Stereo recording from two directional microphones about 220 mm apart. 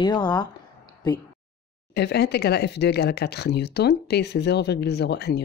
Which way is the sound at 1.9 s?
50° left (ahead or behind).